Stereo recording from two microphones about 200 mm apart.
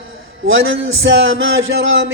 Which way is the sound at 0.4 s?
75° right (ahead or behind).